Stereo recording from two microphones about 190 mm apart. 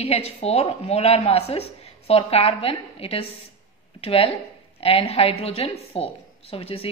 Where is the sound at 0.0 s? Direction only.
35° left (ahead or behind).